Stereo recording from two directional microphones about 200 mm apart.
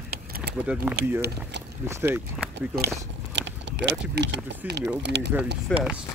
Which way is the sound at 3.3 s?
60° right (ahead or behind).